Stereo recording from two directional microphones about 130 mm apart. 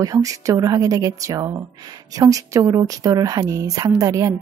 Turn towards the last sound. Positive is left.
turn(degrees=-25)  # may be behind; listen again after turning